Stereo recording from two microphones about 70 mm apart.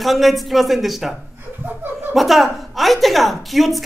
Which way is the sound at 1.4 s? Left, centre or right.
Right.